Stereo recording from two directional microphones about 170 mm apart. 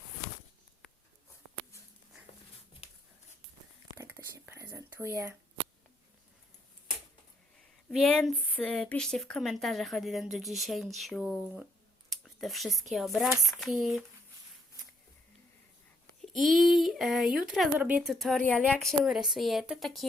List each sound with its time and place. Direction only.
3.9 s whispering: 15° right (ahead or behind)
7.5 s speech: 5° left (ahead or behind)
16.2 s speech: centre (ahead or behind)